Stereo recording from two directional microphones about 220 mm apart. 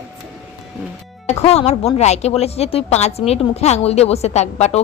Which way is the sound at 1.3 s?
30° left (ahead or behind).